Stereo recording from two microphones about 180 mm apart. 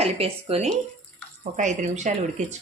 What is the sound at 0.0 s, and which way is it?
A woman's voice, 35° right (ahead or behind).